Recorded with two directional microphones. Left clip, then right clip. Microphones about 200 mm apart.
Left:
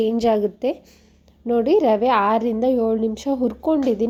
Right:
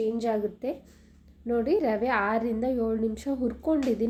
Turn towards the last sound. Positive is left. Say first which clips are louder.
# left 7 dB
turn(degrees=30)  # may be behind; listen again after turning